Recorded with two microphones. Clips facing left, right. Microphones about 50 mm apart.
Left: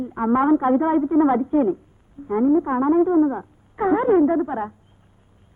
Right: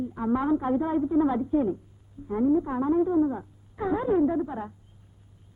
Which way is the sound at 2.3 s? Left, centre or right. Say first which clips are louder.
Left 6 dB; left.